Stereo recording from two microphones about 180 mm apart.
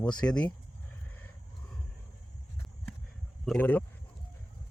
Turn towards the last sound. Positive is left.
turn(degrees=10)  # may be behind; listen again after turning